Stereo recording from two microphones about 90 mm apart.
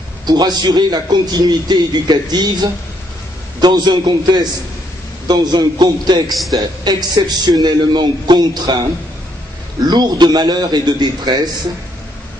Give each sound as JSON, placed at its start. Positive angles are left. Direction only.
{"t": 0.3, "sound": "a man's voice", "side_deg": -50}
{"t": 9.8, "sound": "a man's voice", "side_deg": -50}